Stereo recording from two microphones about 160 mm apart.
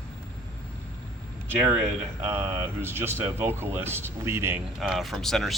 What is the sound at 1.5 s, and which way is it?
Speech, 10° right (ahead or behind).